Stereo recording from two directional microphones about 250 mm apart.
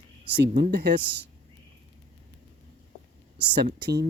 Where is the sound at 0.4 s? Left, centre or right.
Right.